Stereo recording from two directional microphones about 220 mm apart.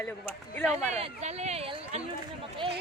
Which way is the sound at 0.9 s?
30° right (ahead or behind).